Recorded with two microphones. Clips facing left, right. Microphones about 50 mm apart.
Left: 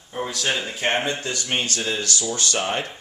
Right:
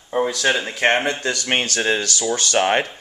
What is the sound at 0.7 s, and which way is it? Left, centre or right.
Speech, right.